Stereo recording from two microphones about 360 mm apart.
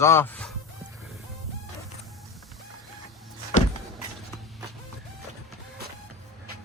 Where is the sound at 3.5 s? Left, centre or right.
Left.